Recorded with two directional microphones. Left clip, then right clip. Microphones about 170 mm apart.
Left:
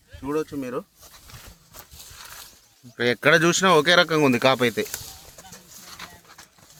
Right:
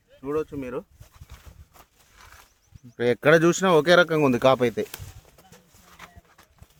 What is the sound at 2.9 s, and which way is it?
Speech, 55° right (ahead or behind).